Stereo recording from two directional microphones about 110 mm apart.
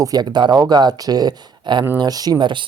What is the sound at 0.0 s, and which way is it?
Speech, 35° right (ahead or behind).